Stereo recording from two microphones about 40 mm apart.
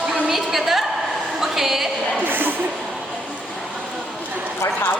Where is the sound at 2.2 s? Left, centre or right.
Right.